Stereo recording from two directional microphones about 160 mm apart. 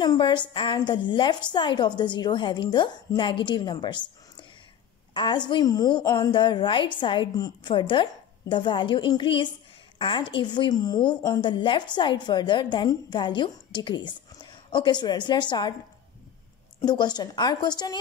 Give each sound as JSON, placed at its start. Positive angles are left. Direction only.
{"t": 0.0, "sound": "a woman's voice", "side_deg": 30}
{"t": 16.8, "sound": "a woman's voice", "side_deg": 25}